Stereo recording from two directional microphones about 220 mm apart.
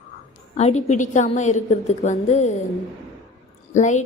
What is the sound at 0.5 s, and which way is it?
A woman's voice, 30° left (ahead or behind).